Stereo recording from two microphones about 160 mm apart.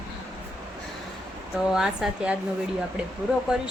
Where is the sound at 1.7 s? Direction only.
5° right (ahead or behind).